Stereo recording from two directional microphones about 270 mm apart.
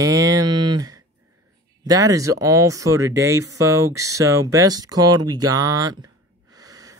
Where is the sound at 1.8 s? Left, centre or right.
Centre.